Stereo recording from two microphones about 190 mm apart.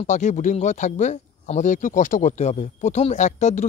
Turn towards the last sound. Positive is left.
turn(degrees=40)  # may be behind; listen again after turning